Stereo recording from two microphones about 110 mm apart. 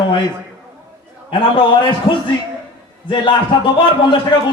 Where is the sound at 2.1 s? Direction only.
55° left (ahead or behind).